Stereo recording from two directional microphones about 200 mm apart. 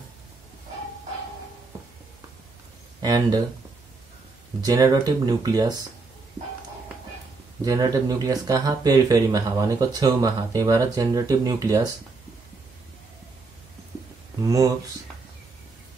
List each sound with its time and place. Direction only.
3.0 s speech: 20° right (ahead or behind)
4.6 s speech: 15° right (ahead or behind)
7.6 s speech: 20° right (ahead or behind)
14.4 s speech: 15° right (ahead or behind)